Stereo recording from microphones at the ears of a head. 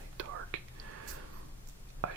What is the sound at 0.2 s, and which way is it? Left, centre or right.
Whispering, right.